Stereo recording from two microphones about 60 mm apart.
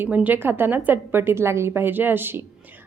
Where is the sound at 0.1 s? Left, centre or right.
Right.